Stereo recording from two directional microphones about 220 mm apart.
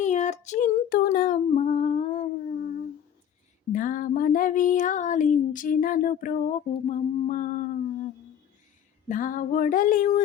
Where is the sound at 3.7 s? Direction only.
40° left (ahead or behind).